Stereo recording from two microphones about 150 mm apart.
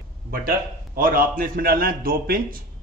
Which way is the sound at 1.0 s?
70° right (ahead or behind).